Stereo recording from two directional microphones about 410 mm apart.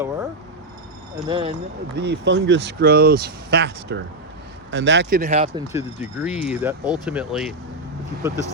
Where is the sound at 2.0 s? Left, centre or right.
Right; by 7.5 s centre.